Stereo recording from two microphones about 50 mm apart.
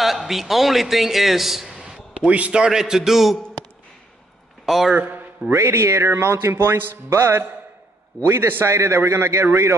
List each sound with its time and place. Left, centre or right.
0.0 s a man's voice: centre
1.8 s a sound: centre
2.3 s a man's voice: right; by 3.3 s centre
4.6 s a man's voice: centre
4.9 s a man's voice: right
5.5 s speech: right
6.0 s a man's voice: right
8.6 s a man's voice: right